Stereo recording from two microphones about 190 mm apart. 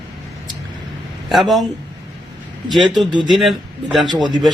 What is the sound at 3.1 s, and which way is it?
Speech, 25° right (ahead or behind).